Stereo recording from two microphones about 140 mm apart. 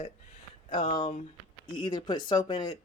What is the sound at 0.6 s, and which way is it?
Speech, 35° left (ahead or behind).